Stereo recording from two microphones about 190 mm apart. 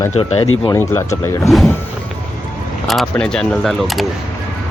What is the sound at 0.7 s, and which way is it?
Speech, 15° left (ahead or behind).